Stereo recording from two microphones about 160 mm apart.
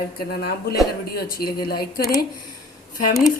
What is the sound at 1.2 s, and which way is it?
Speech, 70° left (ahead or behind).